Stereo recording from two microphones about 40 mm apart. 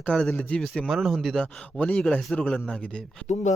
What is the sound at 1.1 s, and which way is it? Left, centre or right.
Speech, centre.